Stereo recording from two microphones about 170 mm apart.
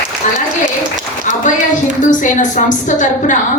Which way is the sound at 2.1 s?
45° left (ahead or behind).